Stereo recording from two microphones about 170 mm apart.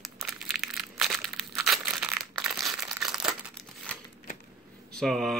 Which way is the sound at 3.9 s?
5° left (ahead or behind).